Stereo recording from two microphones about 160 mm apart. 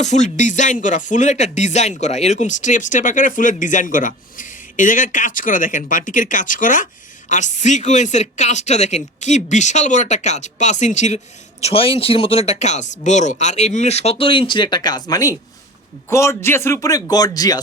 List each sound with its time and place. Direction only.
0.0 s speech: 50° left (ahead or behind)
11.6 s speech: 35° left (ahead or behind)